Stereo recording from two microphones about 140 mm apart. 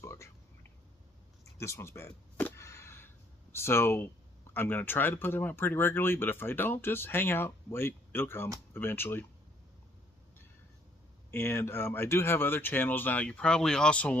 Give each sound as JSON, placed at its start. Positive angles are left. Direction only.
{"t": 0.0, "sound": "whispering", "side_deg": 20}
{"t": 1.4, "sound": "a sound", "side_deg": 20}
{"t": 3.5, "sound": "speech", "side_deg": 20}
{"t": 11.3, "sound": "speech", "side_deg": 15}